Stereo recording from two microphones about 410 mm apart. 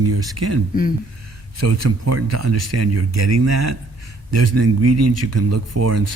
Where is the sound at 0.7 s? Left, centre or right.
Left.